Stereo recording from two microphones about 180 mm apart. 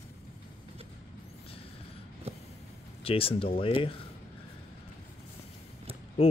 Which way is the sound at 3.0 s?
30° left (ahead or behind).